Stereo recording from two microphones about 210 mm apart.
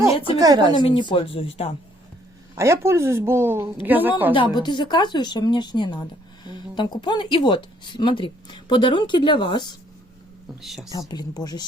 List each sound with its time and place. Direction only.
0.3 s a woman's voice: 15° right (ahead or behind)
0.8 s speech: 20° left (ahead or behind)
2.6 s a woman's voice: 15° right (ahead or behind)
4.4 s speech: 20° left (ahead or behind)
10.6 s speech: centre (ahead or behind)
11.1 s speech: 20° left (ahead or behind)